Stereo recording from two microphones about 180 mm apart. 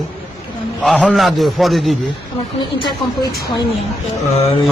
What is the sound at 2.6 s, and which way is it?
Speech, 25° left (ahead or behind).